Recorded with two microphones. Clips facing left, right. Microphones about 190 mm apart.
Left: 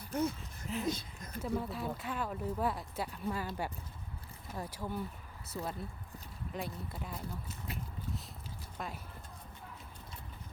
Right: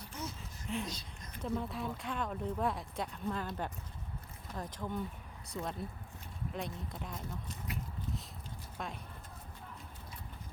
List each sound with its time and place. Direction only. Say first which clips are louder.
0.1 s speech: left 11 dB; 55° left (ahead or behind)
0.3 s a sound: even; centre (ahead or behind)
0.9 s speech: left 9 dB; 55° left (ahead or behind)
1.4 s speech: left 1 dB; 5° left (ahead or behind)
7.7 s a sound: right 1 dB; 30° left (ahead or behind)
8.8 s speech: even; centre (ahead or behind)